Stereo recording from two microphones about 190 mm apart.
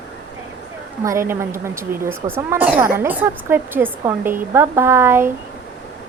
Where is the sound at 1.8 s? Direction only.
50° right (ahead or behind).